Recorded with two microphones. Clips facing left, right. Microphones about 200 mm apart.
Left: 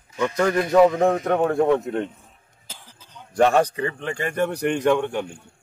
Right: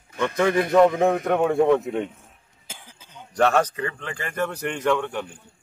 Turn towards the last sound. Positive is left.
turn(degrees=15)  # may be behind; listen again after turning